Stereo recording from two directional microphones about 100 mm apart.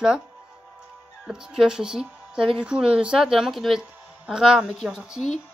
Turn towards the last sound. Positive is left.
turn(degrees=-5)  # may be behind; listen again after turning